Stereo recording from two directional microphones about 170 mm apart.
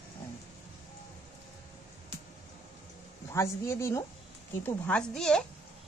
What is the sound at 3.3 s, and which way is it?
A woman's voice, 15° left (ahead or behind).